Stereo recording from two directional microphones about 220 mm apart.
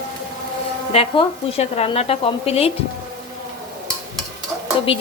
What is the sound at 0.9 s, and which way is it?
Speech, 25° left (ahead or behind).